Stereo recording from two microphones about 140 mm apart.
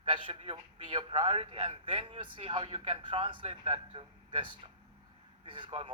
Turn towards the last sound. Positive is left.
turn(degrees=-40)  # may be behind; listen again after turning